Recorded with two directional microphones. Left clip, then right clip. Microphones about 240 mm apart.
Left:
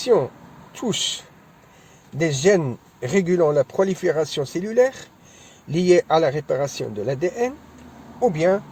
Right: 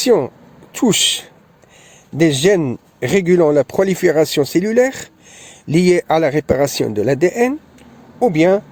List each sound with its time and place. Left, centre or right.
0.0 s speech: right